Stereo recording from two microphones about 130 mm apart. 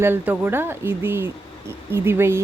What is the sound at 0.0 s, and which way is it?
Speech, 15° right (ahead or behind).